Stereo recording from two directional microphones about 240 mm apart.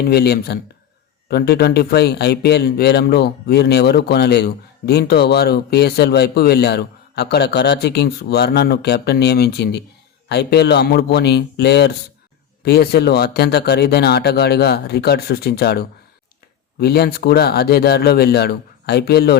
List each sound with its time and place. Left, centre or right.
0.0 s speech: left